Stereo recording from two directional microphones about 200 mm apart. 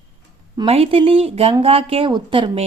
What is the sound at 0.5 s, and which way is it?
Speech, 30° right (ahead or behind).